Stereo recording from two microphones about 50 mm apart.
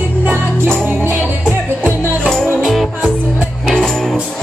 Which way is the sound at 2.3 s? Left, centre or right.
Centre.